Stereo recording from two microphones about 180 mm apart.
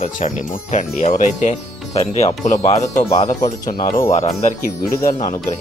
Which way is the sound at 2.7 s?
20° left (ahead or behind).